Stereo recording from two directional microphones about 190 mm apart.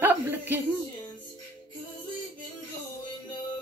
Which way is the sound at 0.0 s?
10° right (ahead or behind).